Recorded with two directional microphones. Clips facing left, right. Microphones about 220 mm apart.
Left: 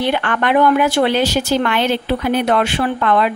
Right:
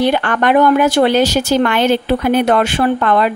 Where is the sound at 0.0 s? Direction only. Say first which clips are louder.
Right 4 dB; 40° right (ahead or behind).